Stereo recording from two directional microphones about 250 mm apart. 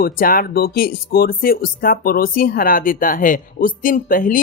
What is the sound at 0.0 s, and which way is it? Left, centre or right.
Speech, left.